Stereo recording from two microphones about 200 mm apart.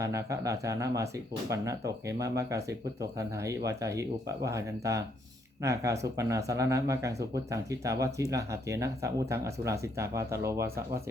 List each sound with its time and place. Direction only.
0.0 s speech: 15° right (ahead or behind)